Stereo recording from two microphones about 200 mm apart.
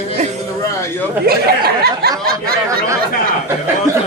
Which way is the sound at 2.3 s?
15° right (ahead or behind).